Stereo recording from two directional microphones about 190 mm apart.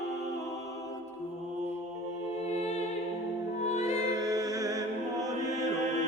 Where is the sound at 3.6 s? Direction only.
35° left (ahead or behind).